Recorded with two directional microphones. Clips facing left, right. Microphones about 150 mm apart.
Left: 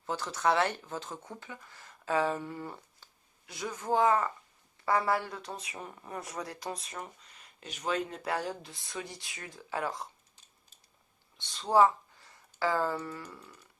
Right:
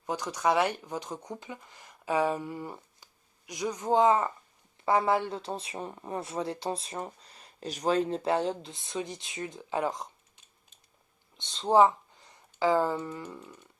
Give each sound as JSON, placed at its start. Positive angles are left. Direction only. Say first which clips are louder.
{"t": 0.0, "sound": "speech", "louder": "right 2 dB", "side_deg": -15}
{"t": 11.3, "sound": "speech", "louder": "right 3 dB", "side_deg": -20}